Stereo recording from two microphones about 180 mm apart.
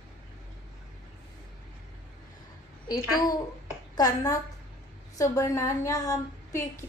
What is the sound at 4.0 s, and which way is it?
A woman's voice, 20° left (ahead or behind).